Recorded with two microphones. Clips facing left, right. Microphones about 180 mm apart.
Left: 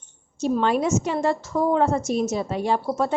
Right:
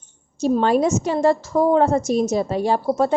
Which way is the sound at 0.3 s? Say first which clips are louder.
Right 4 dB; 35° right (ahead or behind).